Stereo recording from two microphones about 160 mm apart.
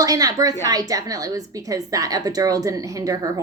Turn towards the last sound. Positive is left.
turn(degrees=-20)  # may be behind; listen again after turning